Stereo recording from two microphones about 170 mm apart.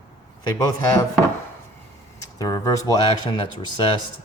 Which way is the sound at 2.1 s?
20° left (ahead or behind).